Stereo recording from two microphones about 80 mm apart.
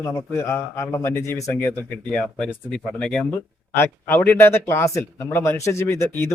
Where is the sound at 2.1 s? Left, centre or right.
Centre.